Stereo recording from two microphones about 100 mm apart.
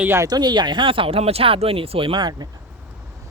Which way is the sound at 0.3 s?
45° right (ahead or behind).